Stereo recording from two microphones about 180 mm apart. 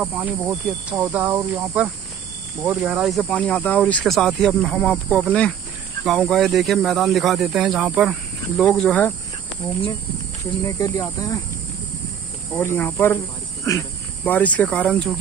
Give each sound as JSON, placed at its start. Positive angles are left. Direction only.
{"t": 0.0, "sound": "speech", "side_deg": -5}
{"t": 8.6, "sound": "speech", "side_deg": 5}
{"t": 10.6, "sound": "speech", "side_deg": 15}
{"t": 12.5, "sound": "speech", "side_deg": 10}